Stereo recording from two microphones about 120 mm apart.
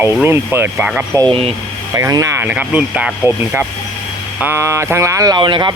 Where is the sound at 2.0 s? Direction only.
25° right (ahead or behind).